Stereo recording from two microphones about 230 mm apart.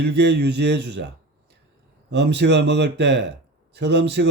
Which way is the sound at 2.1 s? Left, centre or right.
Right.